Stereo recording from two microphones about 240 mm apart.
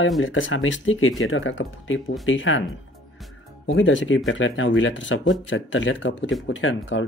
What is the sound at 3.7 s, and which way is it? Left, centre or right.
Speech, left.